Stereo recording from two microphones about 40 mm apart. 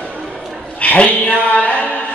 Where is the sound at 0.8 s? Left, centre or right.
Left.